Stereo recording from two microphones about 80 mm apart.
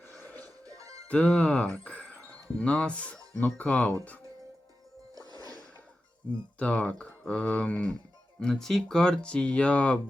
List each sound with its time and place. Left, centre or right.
0.2 s music: left
0.4 s music: right
1.0 s speech: centre
1.8 s a sound: centre
3.3 s speech: centre
5.1 s music: right
6.6 s speech: centre